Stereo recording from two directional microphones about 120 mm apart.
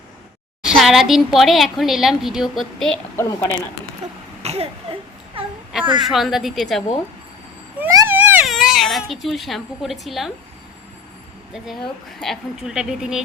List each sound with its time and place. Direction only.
0.6 s speech: 5° right (ahead or behind)
3.2 s speech: 20° left (ahead or behind)
4.4 s a sound: 55° right (ahead or behind)
5.4 s a woman's voice: 50° right (ahead or behind)
6.1 s speech: centre (ahead or behind)
7.9 s a sound: 20° right (ahead or behind)
8.4 s speech: centre (ahead or behind)
12.2 s speech: centre (ahead or behind)